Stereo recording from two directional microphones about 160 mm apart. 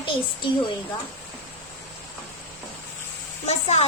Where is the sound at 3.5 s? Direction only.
45° left (ahead or behind).